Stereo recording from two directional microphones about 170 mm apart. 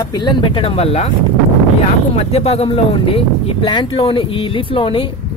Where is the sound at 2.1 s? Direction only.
35° left (ahead or behind).